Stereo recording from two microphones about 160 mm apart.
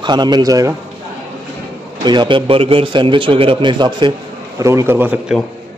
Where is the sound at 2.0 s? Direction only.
30° right (ahead or behind).